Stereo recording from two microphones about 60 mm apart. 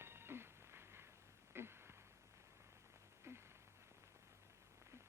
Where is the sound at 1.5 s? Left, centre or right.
Right.